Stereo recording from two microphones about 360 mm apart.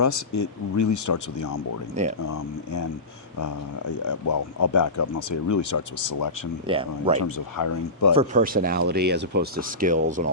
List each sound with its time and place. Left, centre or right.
0.3 s speech: left
2.2 s speech: left
6.0 s speech: left
6.7 s speech: centre
7.3 s speech: left
8.1 s speech: centre